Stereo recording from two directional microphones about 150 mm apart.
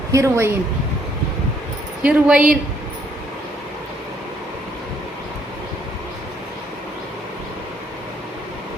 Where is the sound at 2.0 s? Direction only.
5° right (ahead or behind).